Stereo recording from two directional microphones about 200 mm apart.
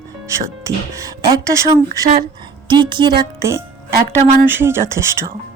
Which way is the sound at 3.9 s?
50° right (ahead or behind).